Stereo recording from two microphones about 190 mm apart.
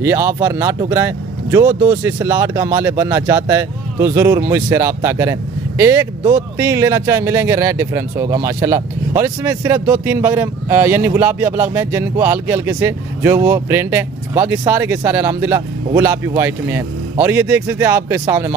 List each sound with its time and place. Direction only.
0.0 s speech: 15° right (ahead or behind)
18.2 s speech: 20° right (ahead or behind)